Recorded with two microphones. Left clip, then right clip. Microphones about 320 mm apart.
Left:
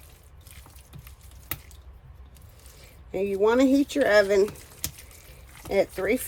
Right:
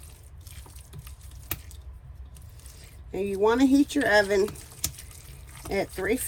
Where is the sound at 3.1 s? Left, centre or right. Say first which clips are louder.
Left 1 dB; left.